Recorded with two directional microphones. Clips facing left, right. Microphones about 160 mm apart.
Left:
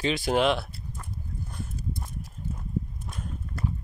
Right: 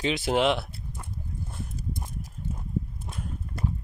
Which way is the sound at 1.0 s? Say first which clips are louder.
Even; 20° right (ahead or behind).